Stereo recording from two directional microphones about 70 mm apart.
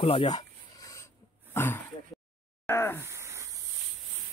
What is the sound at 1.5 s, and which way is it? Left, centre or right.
Speech, left.